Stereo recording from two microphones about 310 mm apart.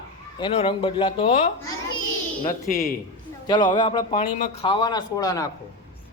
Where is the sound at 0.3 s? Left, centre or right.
Centre.